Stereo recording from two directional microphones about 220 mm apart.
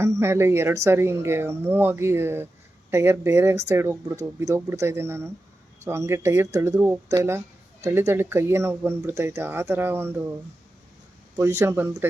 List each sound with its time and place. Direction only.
0.0 s speech: 10° right (ahead or behind)
11.3 s speech: 10° right (ahead or behind)